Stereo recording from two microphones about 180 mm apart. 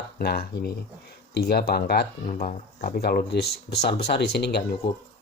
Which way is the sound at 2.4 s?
45° left (ahead or behind).